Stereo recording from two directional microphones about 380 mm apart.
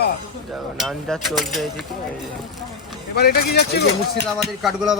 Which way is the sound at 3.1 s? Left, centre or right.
Left.